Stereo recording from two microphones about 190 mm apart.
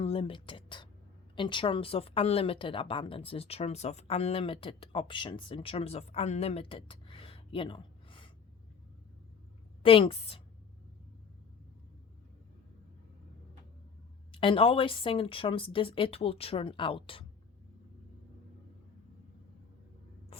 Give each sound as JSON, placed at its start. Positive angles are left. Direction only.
{"t": 0.0, "sound": "a woman's voice", "side_deg": 30}
{"t": 9.8, "sound": "a woman's voice", "side_deg": 30}
{"t": 14.3, "sound": "a woman's voice", "side_deg": 25}